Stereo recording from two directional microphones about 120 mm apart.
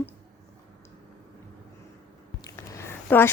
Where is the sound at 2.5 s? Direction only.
25° left (ahead or behind).